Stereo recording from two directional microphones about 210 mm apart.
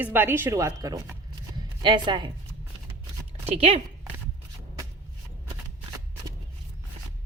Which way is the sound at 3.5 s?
30° right (ahead or behind).